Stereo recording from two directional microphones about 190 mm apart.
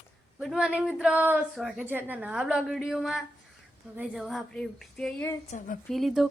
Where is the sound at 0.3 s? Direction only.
Centre (ahead or behind).